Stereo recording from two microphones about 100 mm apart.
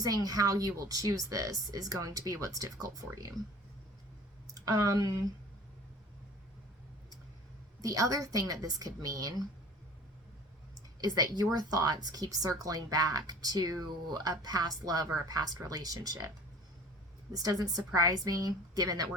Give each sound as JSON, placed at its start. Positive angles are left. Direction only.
{"t": 0.0, "sound": "speech", "side_deg": -35}
{"t": 4.4, "sound": "speech", "side_deg": -35}
{"t": 7.8, "sound": "speech", "side_deg": -35}
{"t": 11.0, "sound": "speech", "side_deg": -40}
{"t": 17.3, "sound": "speech", "side_deg": -40}